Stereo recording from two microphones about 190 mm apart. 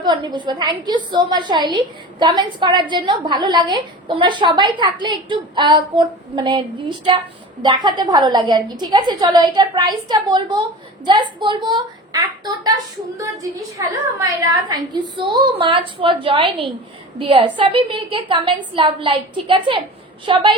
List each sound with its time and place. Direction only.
0.0 s a woman's voice: 20° right (ahead or behind)